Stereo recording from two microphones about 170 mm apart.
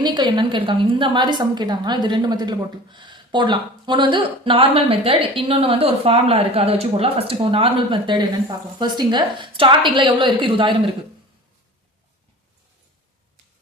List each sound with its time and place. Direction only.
0.0 s a woman's voice: 25° right (ahead or behind)